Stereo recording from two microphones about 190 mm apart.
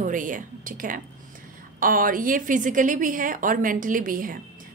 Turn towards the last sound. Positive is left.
turn(degrees=-45)  # may be behind; listen again after turning